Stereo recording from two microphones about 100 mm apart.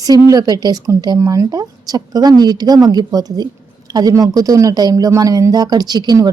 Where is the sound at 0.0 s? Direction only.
35° right (ahead or behind).